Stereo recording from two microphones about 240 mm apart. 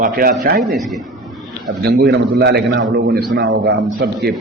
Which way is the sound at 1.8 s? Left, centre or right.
Right.